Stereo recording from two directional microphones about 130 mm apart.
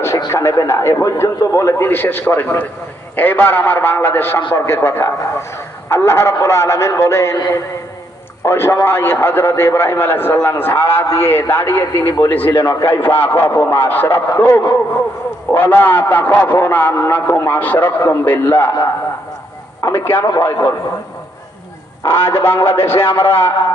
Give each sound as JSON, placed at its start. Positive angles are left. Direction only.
{"t": 0.2, "sound": "a man's voice", "side_deg": 25}
{"t": 19.8, "sound": "a man's voice", "side_deg": 15}
{"t": 22.0, "sound": "speech", "side_deg": 20}